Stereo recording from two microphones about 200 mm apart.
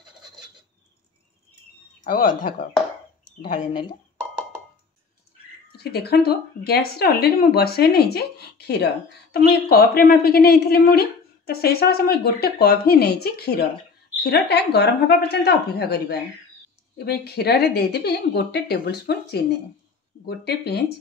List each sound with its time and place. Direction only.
2.0 s speech: 45° left (ahead or behind)
5.8 s speech: 55° left (ahead or behind)